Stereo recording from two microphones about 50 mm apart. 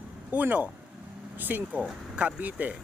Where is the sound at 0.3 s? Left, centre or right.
Right.